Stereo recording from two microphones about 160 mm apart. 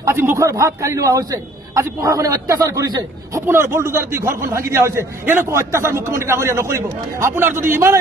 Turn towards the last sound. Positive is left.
turn(degrees=-15)  # may be behind; listen again after turning